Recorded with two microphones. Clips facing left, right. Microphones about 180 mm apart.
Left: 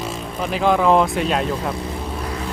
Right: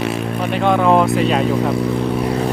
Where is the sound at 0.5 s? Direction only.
Centre (ahead or behind).